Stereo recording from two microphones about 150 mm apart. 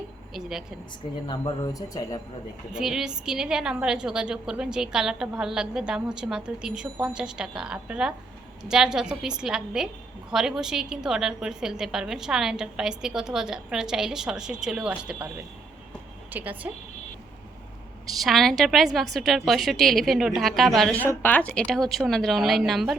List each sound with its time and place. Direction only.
0.3 s a woman's voice: 5° right (ahead or behind)
1.3 s a man's voice: 30° left (ahead or behind)
2.7 s a woman's voice: 5° right (ahead or behind)
16.3 s speech: 10° right (ahead or behind)
18.2 s a woman's voice: centre (ahead or behind)
21.0 s a woman's voice: 15° left (ahead or behind)